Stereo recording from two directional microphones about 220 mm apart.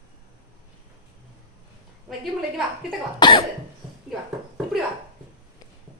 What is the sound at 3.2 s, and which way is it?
Cough, 20° left (ahead or behind).